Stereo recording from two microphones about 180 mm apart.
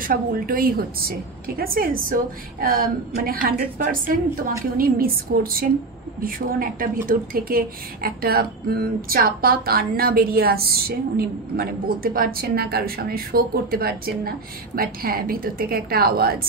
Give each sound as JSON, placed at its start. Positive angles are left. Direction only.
{"t": 0.0, "sound": "a woman's voice", "side_deg": -55}